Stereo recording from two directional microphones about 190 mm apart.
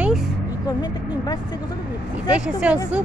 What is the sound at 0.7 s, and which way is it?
Speech, 20° left (ahead or behind).